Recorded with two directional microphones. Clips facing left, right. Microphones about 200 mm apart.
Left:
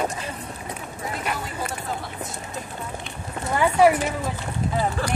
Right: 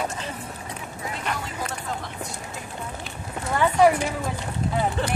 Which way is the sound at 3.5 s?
10° left (ahead or behind).